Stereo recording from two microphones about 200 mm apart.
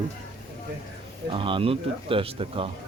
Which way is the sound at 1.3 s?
25° right (ahead or behind).